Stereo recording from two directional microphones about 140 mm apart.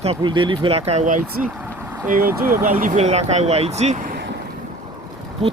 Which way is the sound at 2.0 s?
90° right.